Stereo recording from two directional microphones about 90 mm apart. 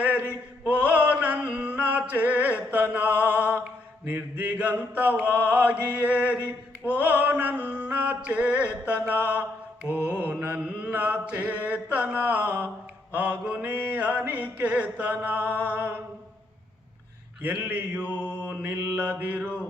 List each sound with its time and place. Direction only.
0.0 s mantra: 15° right (ahead or behind)
0.6 s a sound: 15° right (ahead or behind)
5.5 s mantra: 15° right (ahead or behind)
9.0 s mantra: 25° left (ahead or behind)
9.9 s mantra: 15° right (ahead or behind)
17.4 s mantra: 15° right (ahead or behind)